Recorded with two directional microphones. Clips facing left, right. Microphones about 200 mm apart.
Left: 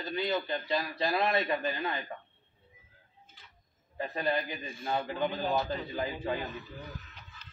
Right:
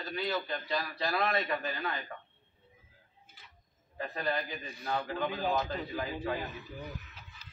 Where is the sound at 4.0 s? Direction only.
25° left (ahead or behind).